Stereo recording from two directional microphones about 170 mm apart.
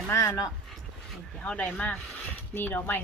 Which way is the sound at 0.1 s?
20° left (ahead or behind).